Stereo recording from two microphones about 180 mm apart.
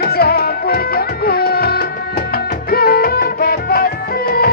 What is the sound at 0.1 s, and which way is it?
Music, 60° left (ahead or behind).